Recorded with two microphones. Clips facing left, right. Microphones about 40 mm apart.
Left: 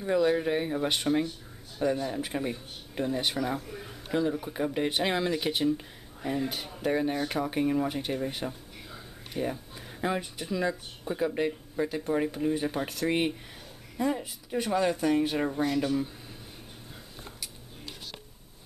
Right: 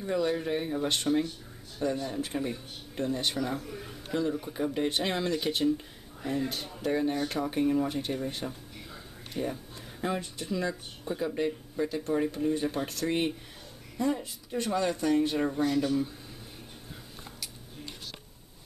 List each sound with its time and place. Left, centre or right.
0.0 s speech: centre